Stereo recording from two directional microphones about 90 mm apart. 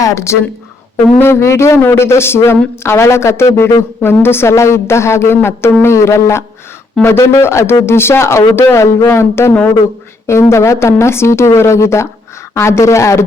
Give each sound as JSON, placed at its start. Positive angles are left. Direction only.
{"t": 0.0, "sound": "a woman's voice", "side_deg": 35}